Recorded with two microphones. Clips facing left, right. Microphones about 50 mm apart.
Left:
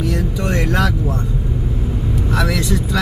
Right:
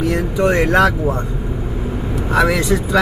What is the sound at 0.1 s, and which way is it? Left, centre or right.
Speech, right.